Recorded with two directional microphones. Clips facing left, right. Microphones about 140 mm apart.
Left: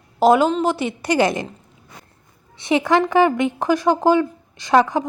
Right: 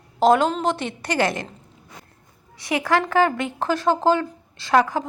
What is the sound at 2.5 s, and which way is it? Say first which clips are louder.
Speech: left 4 dB; 25° left (ahead or behind).